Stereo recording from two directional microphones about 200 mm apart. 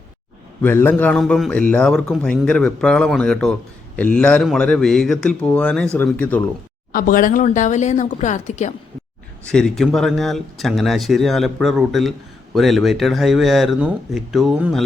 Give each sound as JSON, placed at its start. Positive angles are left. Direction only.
{"t": 0.6, "sound": "a man's voice", "side_deg": 10}
{"t": 6.9, "sound": "speech", "side_deg": 45}
{"t": 9.4, "sound": "a man's voice", "side_deg": 5}